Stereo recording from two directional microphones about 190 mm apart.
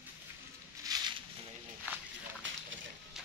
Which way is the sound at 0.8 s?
20° right (ahead or behind).